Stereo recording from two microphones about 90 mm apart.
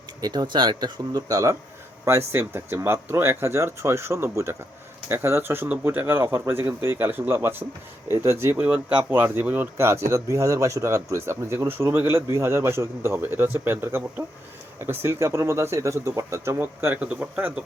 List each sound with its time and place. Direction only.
0.2 s speech: 45° right (ahead or behind)
2.0 s speech: 30° right (ahead or behind)
8.5 s speech: 20° right (ahead or behind)